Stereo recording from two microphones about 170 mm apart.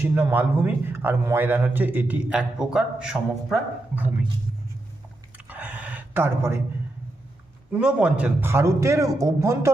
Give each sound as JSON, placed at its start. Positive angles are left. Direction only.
{"t": 0.0, "sound": "a man's voice", "side_deg": -15}
{"t": 5.5, "sound": "a sound", "side_deg": -10}
{"t": 7.7, "sound": "a man's voice", "side_deg": -5}